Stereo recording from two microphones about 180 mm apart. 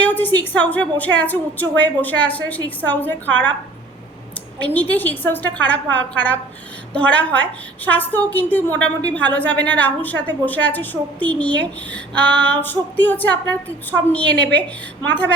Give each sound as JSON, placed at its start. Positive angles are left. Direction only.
{"t": 0.0, "sound": "a woman's voice", "side_deg": 10}
{"t": 4.6, "sound": "a woman's voice", "side_deg": 10}
{"t": 14.3, "sound": "a woman's voice", "side_deg": -70}
{"t": 15.0, "sound": "a woman's voice", "side_deg": 10}